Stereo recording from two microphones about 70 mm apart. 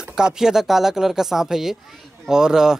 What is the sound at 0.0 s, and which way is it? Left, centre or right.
Speech, centre.